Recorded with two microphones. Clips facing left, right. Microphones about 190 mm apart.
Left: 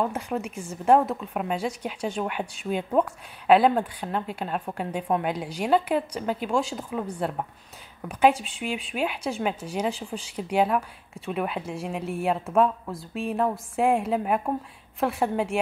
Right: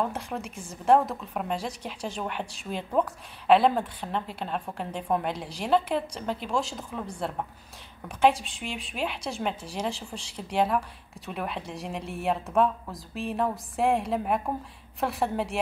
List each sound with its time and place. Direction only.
0.3 s a woman's voice: 5° left (ahead or behind)
9.9 s speech: 30° right (ahead or behind)
10.3 s a woman's voice: 5° left (ahead or behind)